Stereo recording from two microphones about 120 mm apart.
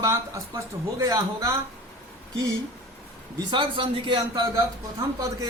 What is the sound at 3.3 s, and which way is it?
A man's voice, 40° right (ahead or behind).